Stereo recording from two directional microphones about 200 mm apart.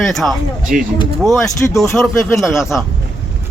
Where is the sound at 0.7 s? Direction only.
40° right (ahead or behind).